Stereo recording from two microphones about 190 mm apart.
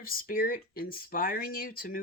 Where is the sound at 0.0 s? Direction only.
50° left (ahead or behind).